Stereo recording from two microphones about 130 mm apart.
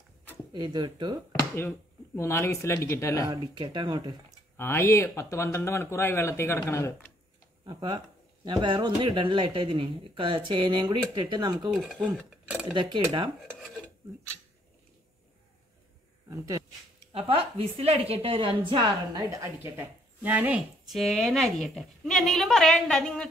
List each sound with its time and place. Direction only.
0.5 s speech: 35° right (ahead or behind)
2.1 s speech: 20° left (ahead or behind)
3.3 s speech: 35° right (ahead or behind)
4.6 s speech: 20° left (ahead or behind)
7.6 s speech: 35° right (ahead or behind)
11.7 s a woman's voice: 5° right (ahead or behind)
12.7 s speech: 40° right (ahead or behind)
16.3 s a sound: 25° right (ahead or behind)
17.1 s a woman's voice: 45° right (ahead or behind)
19.2 s speech: 25° right (ahead or behind)
20.9 s a woman's voice: centre (ahead or behind)